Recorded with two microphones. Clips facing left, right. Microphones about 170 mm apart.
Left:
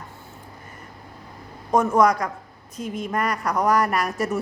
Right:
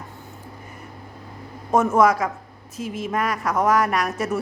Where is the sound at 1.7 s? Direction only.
5° right (ahead or behind).